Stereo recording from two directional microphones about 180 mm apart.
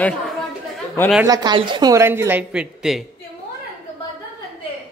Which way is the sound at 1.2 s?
25° right (ahead or behind).